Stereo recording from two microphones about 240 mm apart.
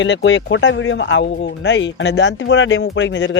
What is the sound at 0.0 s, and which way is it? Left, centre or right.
Speech, left.